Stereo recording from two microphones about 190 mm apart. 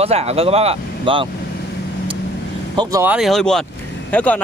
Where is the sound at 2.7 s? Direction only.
15° right (ahead or behind).